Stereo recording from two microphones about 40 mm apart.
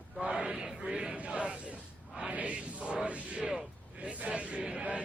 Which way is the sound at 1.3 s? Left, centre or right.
Right.